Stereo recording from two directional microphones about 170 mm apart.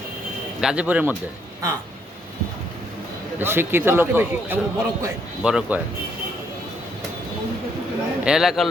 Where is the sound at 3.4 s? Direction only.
15° right (ahead or behind).